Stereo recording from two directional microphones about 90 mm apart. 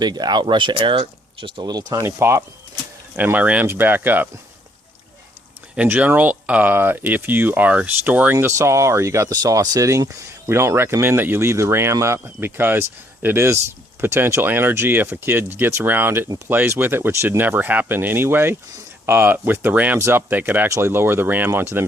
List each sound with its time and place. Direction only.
0.0 s speech: 50° right (ahead or behind); by 1.7 s 70° right (ahead or behind)
2.0 s speech: 30° right (ahead or behind)
3.2 s speech: 15° right (ahead or behind)
5.7 s speech: 15° right (ahead or behind)
20.0 s speech: 30° right (ahead or behind)
20.7 s speech: 30° right (ahead or behind)